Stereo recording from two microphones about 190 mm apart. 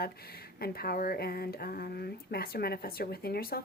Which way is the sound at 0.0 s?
55° left (ahead or behind).